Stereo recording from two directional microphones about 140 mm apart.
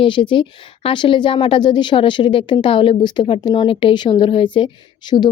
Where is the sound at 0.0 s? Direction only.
35° left (ahead or behind).